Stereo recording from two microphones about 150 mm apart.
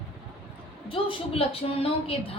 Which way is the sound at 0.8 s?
40° left (ahead or behind).